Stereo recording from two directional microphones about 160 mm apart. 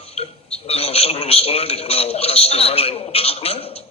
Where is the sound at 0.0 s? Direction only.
40° left (ahead or behind).